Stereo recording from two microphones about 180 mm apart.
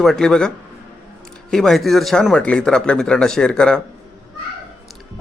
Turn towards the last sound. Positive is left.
turn(degrees=5)  # may be behind; listen again after turning